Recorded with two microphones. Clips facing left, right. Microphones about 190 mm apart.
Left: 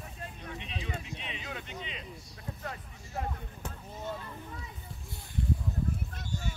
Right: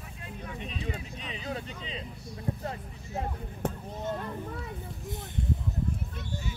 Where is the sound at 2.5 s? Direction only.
35° right (ahead or behind).